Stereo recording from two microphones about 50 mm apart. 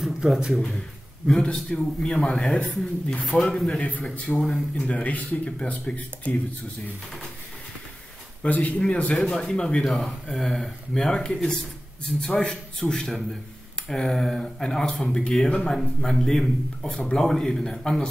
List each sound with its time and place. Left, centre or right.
0.0 s speech: centre
1.2 s a man's voice: centre
3.2 s speech: centre
4.3 s speech: left
8.4 s speech: left
9.1 s a man's voice: centre
9.8 s a man's voice: centre